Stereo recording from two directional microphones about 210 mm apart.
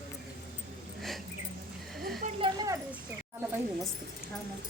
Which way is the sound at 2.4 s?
15° right (ahead or behind).